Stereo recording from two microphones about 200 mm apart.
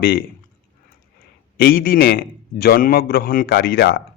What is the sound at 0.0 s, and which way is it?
Speech, 50° left (ahead or behind).